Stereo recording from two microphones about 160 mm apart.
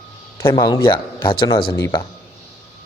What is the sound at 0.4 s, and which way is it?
Speech, 25° left (ahead or behind).